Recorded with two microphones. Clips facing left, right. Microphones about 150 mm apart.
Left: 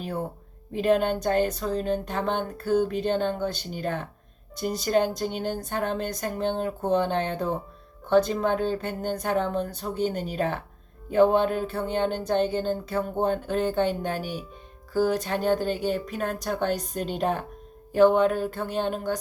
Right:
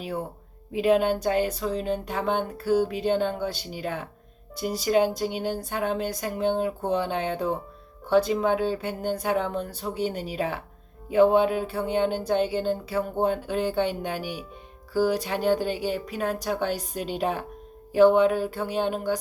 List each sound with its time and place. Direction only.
0.7 s speech: 10° right (ahead or behind)
14.2 s speech: 45° left (ahead or behind)
14.9 s speech: 10° right (ahead or behind)